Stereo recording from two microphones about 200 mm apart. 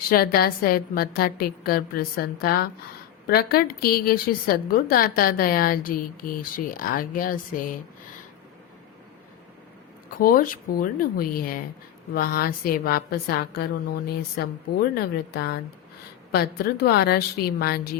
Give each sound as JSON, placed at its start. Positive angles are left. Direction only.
{"t": 0.1, "sound": "a woman's voice", "side_deg": 50}
{"t": 10.2, "sound": "a woman's voice", "side_deg": 45}